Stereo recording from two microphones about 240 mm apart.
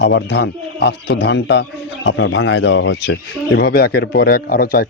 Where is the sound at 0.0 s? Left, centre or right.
Left.